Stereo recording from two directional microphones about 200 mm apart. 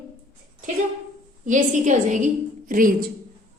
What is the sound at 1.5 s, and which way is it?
A woman's voice, 40° right (ahead or behind).